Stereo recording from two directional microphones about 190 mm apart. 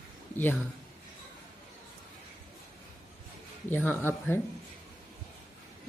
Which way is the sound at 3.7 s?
10° left (ahead or behind).